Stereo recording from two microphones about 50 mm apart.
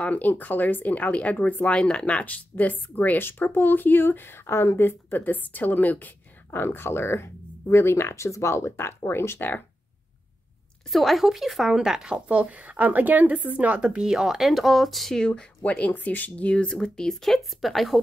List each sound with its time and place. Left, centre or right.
0.0 s speech: left
1.7 s a woman's voice: centre; by 9.4 s left
10.9 s speech: centre
12.3 s speech: right; by 15.1 s centre
15.1 s speech: centre
16.6 s speech: centre